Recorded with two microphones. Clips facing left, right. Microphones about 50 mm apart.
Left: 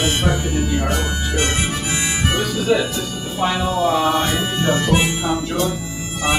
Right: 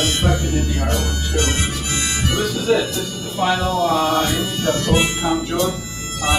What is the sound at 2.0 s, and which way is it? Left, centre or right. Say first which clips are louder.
Harmonica: even; centre.